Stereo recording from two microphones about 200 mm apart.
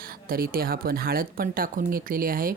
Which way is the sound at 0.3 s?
45° right (ahead or behind).